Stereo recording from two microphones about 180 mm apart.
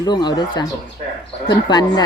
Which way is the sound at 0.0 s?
25° left (ahead or behind).